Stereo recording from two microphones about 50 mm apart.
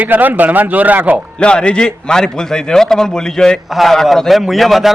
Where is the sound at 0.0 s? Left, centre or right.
Right.